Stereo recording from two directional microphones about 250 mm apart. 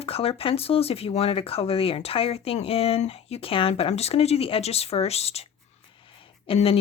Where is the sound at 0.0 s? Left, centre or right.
Left.